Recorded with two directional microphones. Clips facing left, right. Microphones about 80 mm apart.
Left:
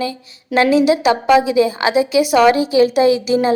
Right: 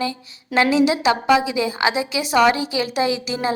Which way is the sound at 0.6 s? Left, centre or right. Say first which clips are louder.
Left 4 dB; right.